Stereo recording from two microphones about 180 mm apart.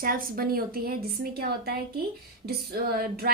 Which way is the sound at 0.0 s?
50° right (ahead or behind).